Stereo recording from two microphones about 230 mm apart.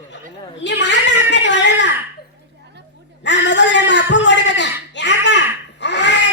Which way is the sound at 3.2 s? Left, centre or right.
Left.